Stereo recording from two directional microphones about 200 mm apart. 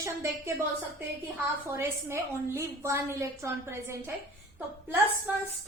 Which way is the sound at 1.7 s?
10° right (ahead or behind).